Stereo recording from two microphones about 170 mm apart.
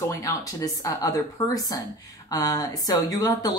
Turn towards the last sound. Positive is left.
turn(degrees=25)  # may be behind; listen again after turning